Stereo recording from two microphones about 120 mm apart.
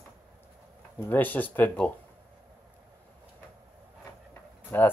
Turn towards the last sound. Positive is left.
turn(degrees=15)  # may be behind; listen again after turning